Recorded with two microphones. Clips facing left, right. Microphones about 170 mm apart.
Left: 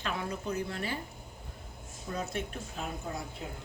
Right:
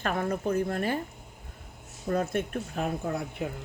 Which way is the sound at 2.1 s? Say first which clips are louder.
Right 8 dB; 55° right (ahead or behind).